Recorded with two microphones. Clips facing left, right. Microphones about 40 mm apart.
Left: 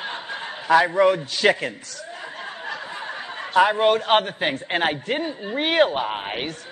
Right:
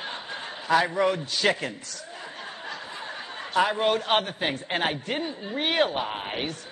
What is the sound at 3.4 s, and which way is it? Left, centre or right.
A man's voice, centre.